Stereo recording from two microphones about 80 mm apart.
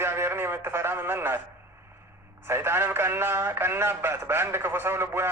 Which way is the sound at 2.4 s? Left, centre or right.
Right.